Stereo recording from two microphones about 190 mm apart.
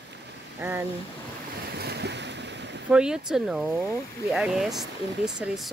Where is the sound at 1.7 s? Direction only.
60° right (ahead or behind).